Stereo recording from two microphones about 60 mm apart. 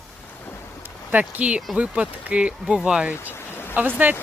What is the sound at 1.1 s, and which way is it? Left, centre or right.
Speech, right.